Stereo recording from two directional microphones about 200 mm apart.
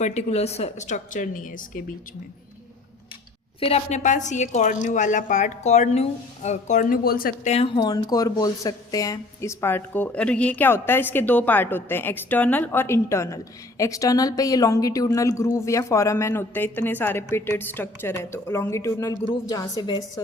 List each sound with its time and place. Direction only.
0.0 s a woman's voice: 35° left (ahead or behind)
3.6 s a woman's voice: 30° left (ahead or behind)
7.5 s speech: 25° left (ahead or behind)